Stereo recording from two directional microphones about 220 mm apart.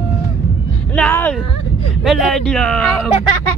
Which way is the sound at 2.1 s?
Centre (ahead or behind).